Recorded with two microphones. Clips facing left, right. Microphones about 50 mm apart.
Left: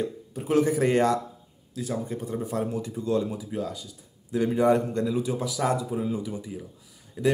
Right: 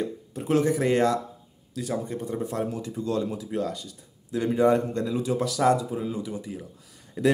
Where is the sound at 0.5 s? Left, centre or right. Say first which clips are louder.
Even; left.